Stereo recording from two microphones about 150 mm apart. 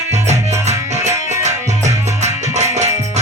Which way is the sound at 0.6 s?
50° right (ahead or behind).